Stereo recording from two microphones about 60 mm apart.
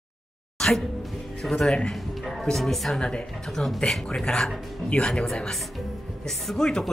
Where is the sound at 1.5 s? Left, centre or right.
Centre.